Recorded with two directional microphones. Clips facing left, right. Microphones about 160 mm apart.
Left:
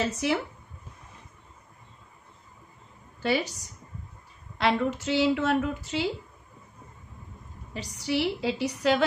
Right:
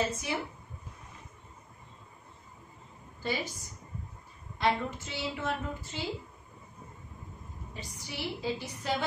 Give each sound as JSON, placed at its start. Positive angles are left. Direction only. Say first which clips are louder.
{"t": 0.1, "sound": "speech", "louder": "left 8 dB", "side_deg": 75}
{"t": 3.2, "sound": "a woman's voice", "louder": "left 7 dB", "side_deg": 75}
{"t": 4.6, "sound": "a woman's voice", "louder": "left 5 dB", "side_deg": 80}
{"t": 7.7, "sound": "a woman's voice", "louder": "left 14 dB", "side_deg": 80}